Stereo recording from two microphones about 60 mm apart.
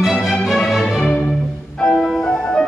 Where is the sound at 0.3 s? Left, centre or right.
Centre.